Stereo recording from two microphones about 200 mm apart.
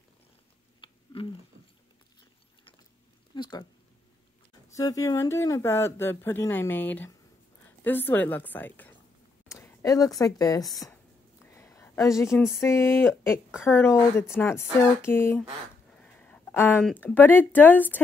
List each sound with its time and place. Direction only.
0.7 s a sound: 25° left (ahead or behind)
3.3 s speech: 20° left (ahead or behind)
4.7 s a woman's voice: 15° left (ahead or behind)
10.6 s speech: centre (ahead or behind)
11.5 s a sound: 15° left (ahead or behind)
12.6 s speech: 15° left (ahead or behind)